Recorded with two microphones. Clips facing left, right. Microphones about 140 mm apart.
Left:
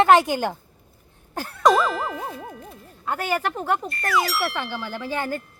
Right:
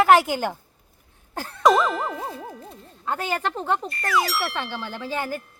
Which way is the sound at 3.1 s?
10° left (ahead or behind).